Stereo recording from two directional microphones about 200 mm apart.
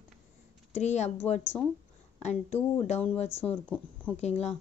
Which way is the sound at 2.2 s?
35° left (ahead or behind).